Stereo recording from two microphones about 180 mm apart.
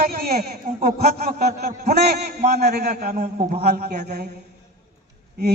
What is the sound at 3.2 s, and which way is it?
Speech, 40° right (ahead or behind).